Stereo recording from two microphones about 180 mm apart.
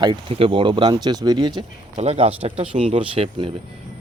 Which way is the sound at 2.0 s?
35° right (ahead or behind).